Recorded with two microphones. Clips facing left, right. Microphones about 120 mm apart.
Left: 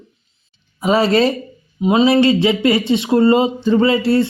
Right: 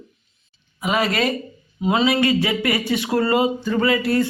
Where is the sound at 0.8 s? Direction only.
30° left (ahead or behind).